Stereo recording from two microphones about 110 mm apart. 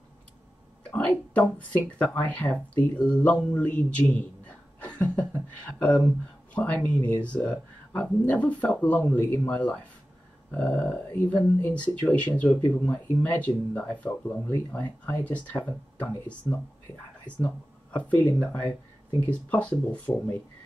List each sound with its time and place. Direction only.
0.9 s a woman's voice: 10° left (ahead or behind)
4.9 s a sound: 15° left (ahead or behind)
5.6 s speech: 15° left (ahead or behind)
17.9 s speech: 15° left (ahead or behind)